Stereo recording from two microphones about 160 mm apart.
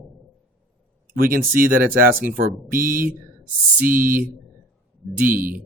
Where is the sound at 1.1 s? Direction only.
65° right (ahead or behind).